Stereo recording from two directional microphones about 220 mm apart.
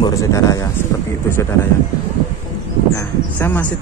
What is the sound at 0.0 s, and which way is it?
Speech, 15° left (ahead or behind).